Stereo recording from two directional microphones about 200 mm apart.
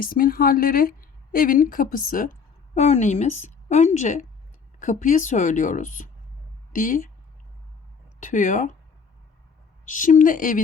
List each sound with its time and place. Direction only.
0.0 s a woman's voice: 45° left (ahead or behind)
8.2 s a woman's voice: 40° left (ahead or behind)
9.8 s a woman's voice: 40° left (ahead or behind)